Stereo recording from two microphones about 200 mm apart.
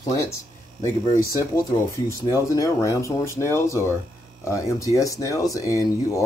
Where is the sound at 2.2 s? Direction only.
15° left (ahead or behind).